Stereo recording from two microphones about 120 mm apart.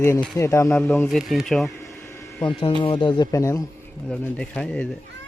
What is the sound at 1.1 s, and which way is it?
Speech, centre (ahead or behind).